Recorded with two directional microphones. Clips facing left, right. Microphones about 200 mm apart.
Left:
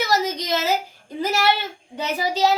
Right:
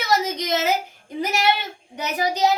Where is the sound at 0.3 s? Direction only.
20° right (ahead or behind).